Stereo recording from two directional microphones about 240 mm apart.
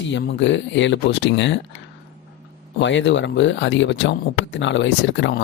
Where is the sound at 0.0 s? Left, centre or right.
Left.